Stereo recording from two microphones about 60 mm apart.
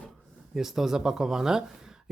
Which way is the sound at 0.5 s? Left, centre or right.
Centre.